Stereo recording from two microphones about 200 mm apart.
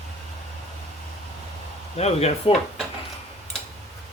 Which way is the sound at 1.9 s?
30° left (ahead or behind).